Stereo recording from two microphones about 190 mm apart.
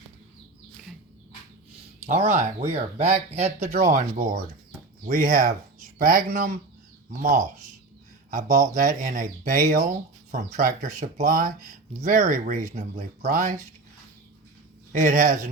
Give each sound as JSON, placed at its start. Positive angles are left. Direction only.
{"t": 2.0, "sound": "speech", "side_deg": -35}
{"t": 14.9, "sound": "speech", "side_deg": -45}